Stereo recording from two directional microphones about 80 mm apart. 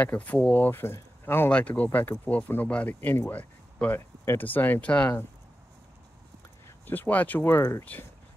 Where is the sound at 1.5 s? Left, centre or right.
Centre.